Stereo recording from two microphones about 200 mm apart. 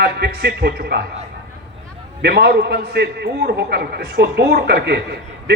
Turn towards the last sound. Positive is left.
turn(degrees=-55)  # may be behind; listen again after turning